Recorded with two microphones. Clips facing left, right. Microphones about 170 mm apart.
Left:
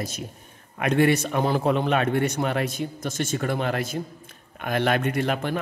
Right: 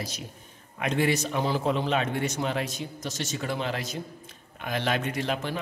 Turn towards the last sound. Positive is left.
turn(degrees=55)  # may be behind; listen again after turning